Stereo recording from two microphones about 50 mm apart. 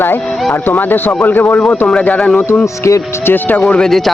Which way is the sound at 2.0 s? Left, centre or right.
Left.